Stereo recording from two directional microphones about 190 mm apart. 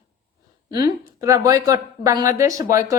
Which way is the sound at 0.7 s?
20° right (ahead or behind).